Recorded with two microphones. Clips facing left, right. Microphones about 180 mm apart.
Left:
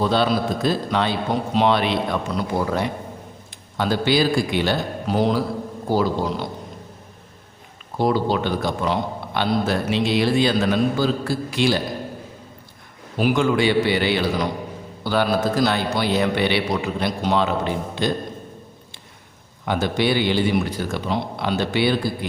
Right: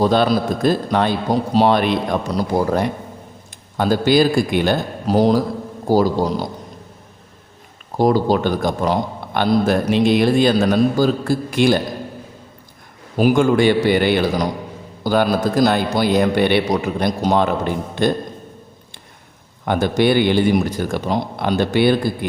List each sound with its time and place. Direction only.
0.0 s a man's voice: 45° right (ahead or behind)
7.9 s a man's voice: 40° right (ahead or behind)
13.1 s a man's voice: 45° right (ahead or behind)
19.6 s a man's voice: 50° right (ahead or behind)